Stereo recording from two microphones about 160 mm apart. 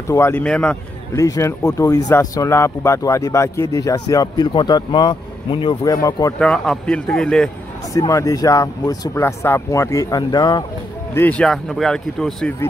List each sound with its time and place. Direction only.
0.1 s speech: 15° left (ahead or behind)
1.1 s speech: 20° left (ahead or behind)
6.4 s speech: 5° left (ahead or behind)
7.9 s speech: 20° left (ahead or behind)
11.1 s speech: 10° left (ahead or behind)